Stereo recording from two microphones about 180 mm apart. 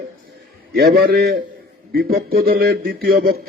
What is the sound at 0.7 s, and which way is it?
Speech, 60° right (ahead or behind).